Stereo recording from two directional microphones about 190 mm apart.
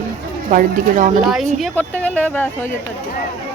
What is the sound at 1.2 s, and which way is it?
Speech, centre (ahead or behind).